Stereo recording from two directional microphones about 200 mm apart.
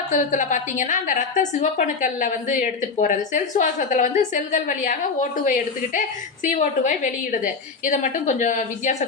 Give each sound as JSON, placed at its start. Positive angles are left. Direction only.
{"t": 0.1, "sound": "a woman's voice", "side_deg": 40}